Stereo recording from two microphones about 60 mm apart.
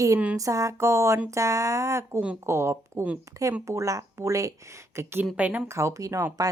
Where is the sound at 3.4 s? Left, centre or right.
Right.